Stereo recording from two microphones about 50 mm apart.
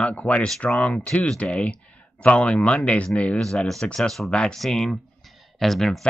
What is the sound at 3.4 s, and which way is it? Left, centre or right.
Speech, centre.